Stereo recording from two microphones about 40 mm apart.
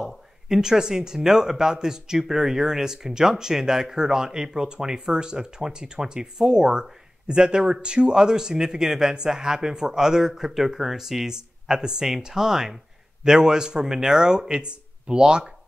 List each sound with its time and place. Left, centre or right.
0.0 s speech: centre